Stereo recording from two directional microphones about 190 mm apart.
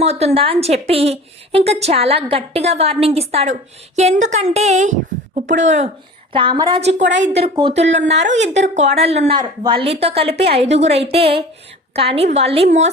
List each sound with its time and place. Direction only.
0.0 s a woman's voice: 35° right (ahead or behind)
6.3 s a woman's voice: 25° right (ahead or behind)
7.0 s a woman's voice: 70° right (ahead or behind)
7.6 s a woman's voice: 35° right (ahead or behind)